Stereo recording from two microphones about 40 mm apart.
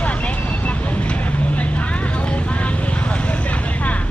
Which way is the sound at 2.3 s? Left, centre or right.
Left.